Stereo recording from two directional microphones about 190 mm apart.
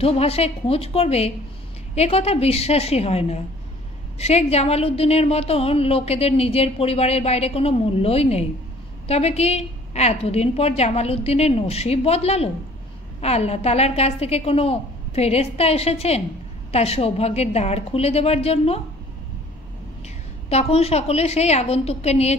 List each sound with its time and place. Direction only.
0.0 s a woman's voice: 30° left (ahead or behind)
20.4 s a woman's voice: 35° left (ahead or behind)